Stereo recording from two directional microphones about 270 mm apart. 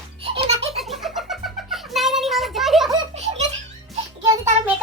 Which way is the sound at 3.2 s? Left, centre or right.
Right.